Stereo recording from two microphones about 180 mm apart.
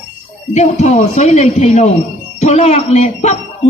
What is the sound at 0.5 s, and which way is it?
Speech, 40° left (ahead or behind).